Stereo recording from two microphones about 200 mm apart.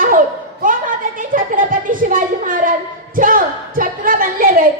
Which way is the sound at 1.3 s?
45° right (ahead or behind).